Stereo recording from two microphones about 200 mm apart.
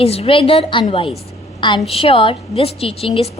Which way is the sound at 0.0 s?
30° left (ahead or behind).